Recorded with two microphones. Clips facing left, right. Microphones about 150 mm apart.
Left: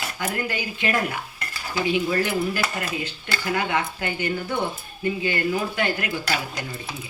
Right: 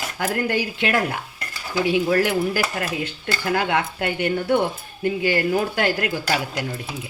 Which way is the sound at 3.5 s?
75° right (ahead or behind).